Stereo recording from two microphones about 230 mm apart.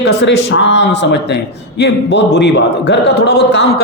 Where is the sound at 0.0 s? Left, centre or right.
Left.